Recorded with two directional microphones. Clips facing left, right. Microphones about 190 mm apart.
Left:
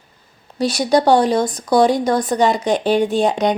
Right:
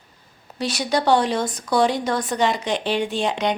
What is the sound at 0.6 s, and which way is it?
Speech, 35° left (ahead or behind).